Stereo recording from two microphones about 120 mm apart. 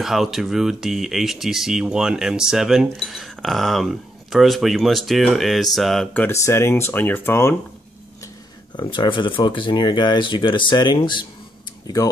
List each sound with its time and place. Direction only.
0.0 s speech: centre (ahead or behind)
6.1 s speech: 20° left (ahead or behind)
8.7 s speech: 40° left (ahead or behind)